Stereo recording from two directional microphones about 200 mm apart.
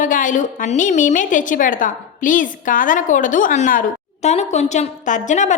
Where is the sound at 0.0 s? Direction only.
40° left (ahead or behind).